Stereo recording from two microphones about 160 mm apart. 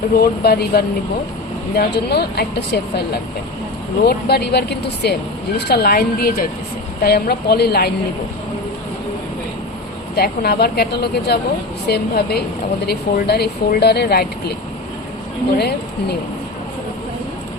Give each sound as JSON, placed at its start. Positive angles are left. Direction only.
{"t": 0.1, "sound": "speech", "side_deg": 70}
{"t": 1.7, "sound": "speech", "side_deg": 85}
{"t": 4.0, "sound": "speech", "side_deg": 85}
{"t": 10.2, "sound": "speech", "side_deg": 80}
{"t": 15.5, "sound": "speech", "side_deg": 90}